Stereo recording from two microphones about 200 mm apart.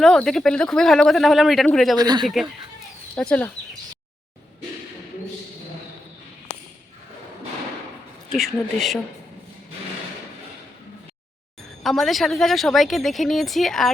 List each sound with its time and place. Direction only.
0.0 s a woman's voice: centre (ahead or behind)
2.0 s speech: 20° right (ahead or behind)
2.2 s a woman's voice: centre (ahead or behind)
8.3 s a woman's voice: centre (ahead or behind)
11.8 s a woman's voice: centre (ahead or behind)